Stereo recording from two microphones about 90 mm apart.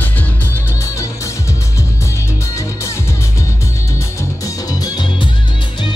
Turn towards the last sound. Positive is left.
turn(degrees=45)  # may be behind; listen again after turning